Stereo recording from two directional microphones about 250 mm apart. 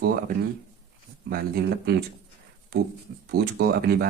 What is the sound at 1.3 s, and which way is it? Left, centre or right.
Speech, right.